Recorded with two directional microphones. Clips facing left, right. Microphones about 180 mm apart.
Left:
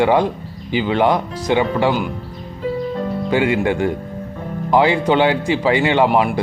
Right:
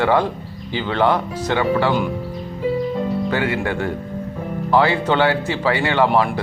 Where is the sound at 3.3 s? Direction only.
15° left (ahead or behind).